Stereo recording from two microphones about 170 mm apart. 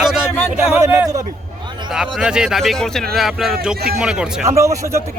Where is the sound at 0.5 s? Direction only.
15° right (ahead or behind).